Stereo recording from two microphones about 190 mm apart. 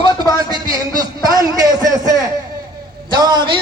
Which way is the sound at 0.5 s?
20° right (ahead or behind).